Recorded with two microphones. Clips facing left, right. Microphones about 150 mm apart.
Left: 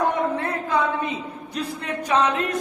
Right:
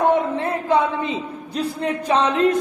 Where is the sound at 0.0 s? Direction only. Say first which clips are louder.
Right 4 dB; 25° right (ahead or behind).